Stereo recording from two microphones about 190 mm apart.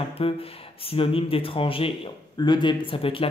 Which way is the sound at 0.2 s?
30° left (ahead or behind).